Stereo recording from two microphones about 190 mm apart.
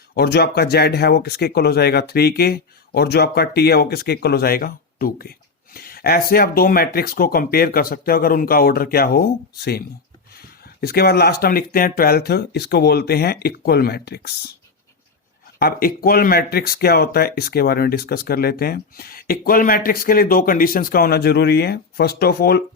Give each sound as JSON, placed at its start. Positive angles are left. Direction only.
{"t": 0.1, "sound": "speech", "side_deg": 55}
{"t": 15.5, "sound": "speech", "side_deg": 50}